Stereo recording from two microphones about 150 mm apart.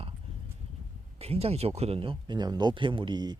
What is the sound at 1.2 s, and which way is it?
Speech, 45° right (ahead or behind).